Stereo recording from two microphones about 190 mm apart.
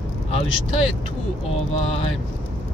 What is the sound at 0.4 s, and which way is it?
Speech, 30° left (ahead or behind).